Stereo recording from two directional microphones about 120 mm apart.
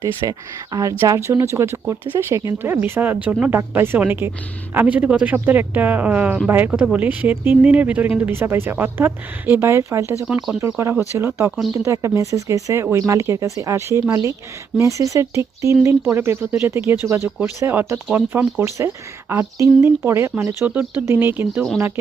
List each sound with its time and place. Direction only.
0.2 s speech: 30° right (ahead or behind)
10.2 s speech: 10° right (ahead or behind)
10.6 s speech: 20° right (ahead or behind)